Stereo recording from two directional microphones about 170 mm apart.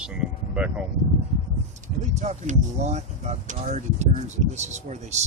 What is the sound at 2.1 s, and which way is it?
Speech, 40° right (ahead or behind).